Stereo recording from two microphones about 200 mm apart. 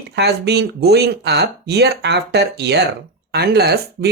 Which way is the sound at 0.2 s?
55° right (ahead or behind).